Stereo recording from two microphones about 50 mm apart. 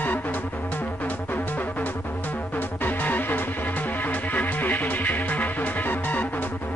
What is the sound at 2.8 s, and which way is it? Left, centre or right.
Music, left.